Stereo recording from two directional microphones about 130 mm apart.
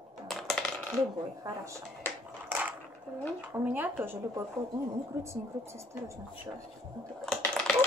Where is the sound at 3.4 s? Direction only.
15° right (ahead or behind).